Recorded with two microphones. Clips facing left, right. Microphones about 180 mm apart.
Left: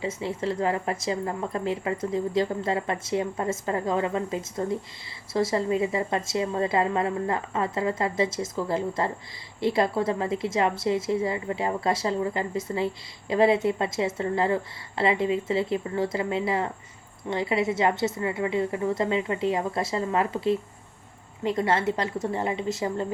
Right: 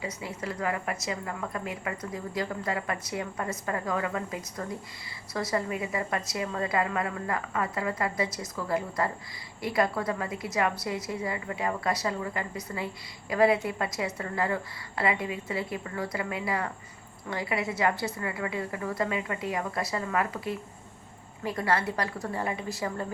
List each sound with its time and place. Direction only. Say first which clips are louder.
0.0 s a woman's voice: left 7 dB; 25° left (ahead or behind)